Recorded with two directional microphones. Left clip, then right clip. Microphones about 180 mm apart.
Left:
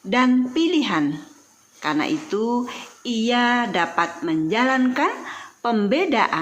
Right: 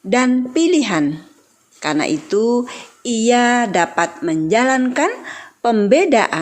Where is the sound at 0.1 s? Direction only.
40° right (ahead or behind).